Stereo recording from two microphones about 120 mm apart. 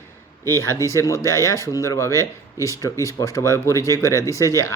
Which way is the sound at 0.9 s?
25° left (ahead or behind).